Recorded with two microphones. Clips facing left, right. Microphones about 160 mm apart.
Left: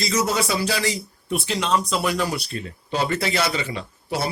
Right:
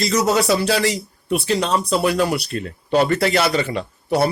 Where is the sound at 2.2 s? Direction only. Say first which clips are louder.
Right 5 dB; 70° right (ahead or behind).